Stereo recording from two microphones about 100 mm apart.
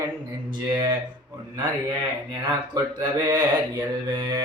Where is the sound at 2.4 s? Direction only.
45° right (ahead or behind).